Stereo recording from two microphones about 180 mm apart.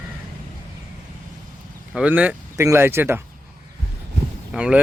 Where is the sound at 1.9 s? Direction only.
5° right (ahead or behind).